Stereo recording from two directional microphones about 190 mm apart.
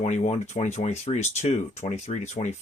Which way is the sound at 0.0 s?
35° left (ahead or behind).